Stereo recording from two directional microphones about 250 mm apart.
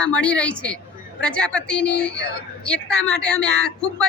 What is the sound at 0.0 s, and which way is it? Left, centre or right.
A man's voice, centre.